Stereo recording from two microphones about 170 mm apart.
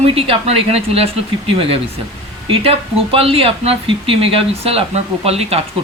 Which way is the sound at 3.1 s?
35° right (ahead or behind).